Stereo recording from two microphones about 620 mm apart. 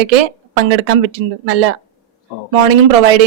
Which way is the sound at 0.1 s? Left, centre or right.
Right.